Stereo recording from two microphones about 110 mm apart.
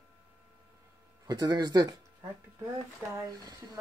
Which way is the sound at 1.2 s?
40° right (ahead or behind).